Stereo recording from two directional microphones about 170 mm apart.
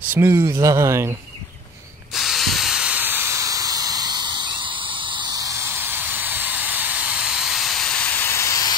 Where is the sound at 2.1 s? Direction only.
Centre (ahead or behind).